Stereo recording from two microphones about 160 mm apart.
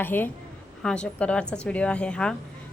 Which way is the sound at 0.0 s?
10° left (ahead or behind).